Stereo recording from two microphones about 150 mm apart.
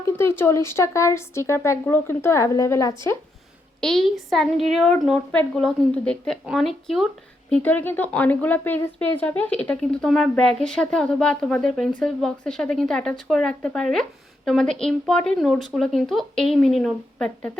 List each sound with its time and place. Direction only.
0.2 s speech: 15° left (ahead or behind)
3.8 s speech: centre (ahead or behind)
7.5 s speech: 10° left (ahead or behind)